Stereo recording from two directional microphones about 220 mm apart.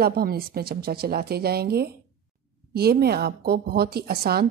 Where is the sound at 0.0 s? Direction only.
45° right (ahead or behind).